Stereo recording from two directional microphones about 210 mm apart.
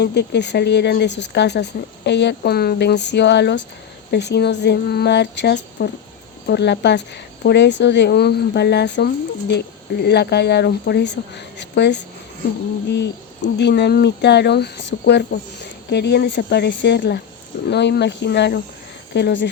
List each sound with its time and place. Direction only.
0.0 s speech: 55° left (ahead or behind)